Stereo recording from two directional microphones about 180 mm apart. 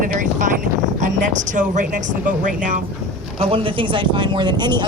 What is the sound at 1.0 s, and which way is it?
Speech, 45° right (ahead or behind).